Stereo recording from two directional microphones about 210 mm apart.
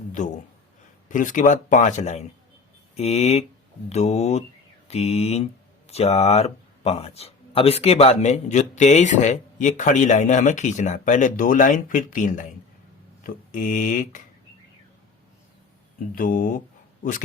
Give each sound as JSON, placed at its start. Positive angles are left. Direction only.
{"t": 0.1, "sound": "a sound", "side_deg": 35}
{"t": 1.0, "sound": "speech", "side_deg": 40}
{"t": 2.9, "sound": "mantra", "side_deg": 30}
{"t": 3.8, "sound": "speech", "side_deg": 30}
{"t": 4.9, "sound": "mantra", "side_deg": 30}
{"t": 5.9, "sound": "speech", "side_deg": 30}
{"t": 16.1, "sound": "a man's voice", "side_deg": 40}